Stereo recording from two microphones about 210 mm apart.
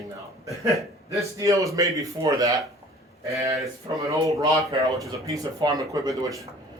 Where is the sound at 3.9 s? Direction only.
15° right (ahead or behind).